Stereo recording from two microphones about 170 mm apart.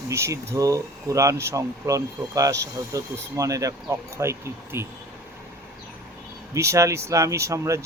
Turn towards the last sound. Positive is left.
turn(degrees=-15)  # may be behind; listen again after turning